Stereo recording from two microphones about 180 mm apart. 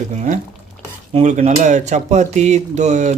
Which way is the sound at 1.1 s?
40° right (ahead or behind).